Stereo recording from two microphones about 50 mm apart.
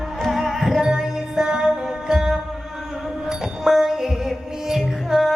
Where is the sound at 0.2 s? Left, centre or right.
Centre.